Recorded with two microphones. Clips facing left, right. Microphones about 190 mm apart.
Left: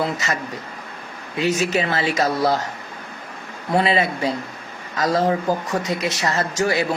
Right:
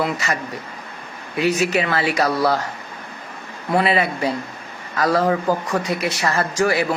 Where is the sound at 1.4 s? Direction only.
25° left (ahead or behind).